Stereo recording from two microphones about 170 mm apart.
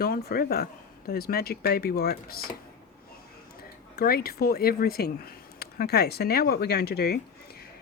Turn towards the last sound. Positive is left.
turn(degrees=70)  # may be behind; listen again after turning